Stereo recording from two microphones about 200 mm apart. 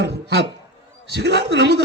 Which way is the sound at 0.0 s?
55° right (ahead or behind).